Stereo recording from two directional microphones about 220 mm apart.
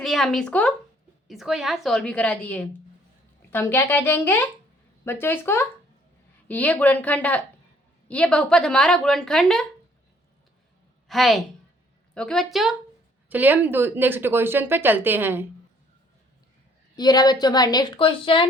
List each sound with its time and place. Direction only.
0.0 s a woman's voice: centre (ahead or behind)
11.1 s a woman's voice: centre (ahead or behind)
16.9 s a woman's voice: 20° left (ahead or behind)